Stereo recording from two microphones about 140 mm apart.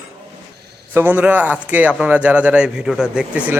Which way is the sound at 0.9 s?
15° right (ahead or behind).